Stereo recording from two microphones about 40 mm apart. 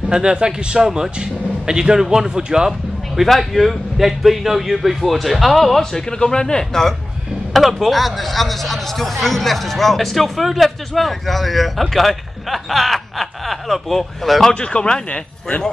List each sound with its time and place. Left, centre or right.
0.1 s speech: right
3.2 s speech: centre
7.5 s speech: centre
14.5 s speech: left